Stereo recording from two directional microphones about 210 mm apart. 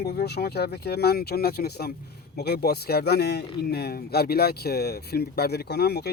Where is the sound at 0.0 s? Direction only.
50° left (ahead or behind).